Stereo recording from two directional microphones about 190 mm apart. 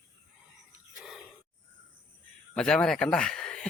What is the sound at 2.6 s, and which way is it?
Speech, 5° left (ahead or behind).